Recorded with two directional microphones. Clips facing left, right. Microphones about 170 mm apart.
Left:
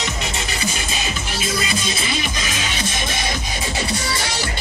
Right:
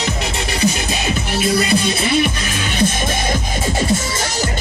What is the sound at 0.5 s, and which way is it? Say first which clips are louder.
Music: right 7 dB; 55° right (ahead or behind).